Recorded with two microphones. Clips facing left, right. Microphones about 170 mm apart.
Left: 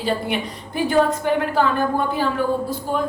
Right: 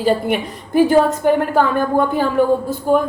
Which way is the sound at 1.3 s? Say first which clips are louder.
Right 3 dB; 50° right (ahead or behind).